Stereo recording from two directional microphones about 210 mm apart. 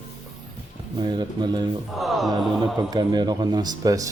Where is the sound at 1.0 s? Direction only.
20° right (ahead or behind).